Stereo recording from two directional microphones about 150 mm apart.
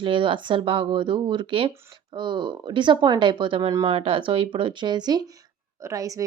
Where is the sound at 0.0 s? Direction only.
35° right (ahead or behind).